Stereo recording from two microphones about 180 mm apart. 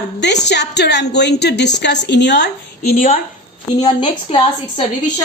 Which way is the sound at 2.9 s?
50° left (ahead or behind).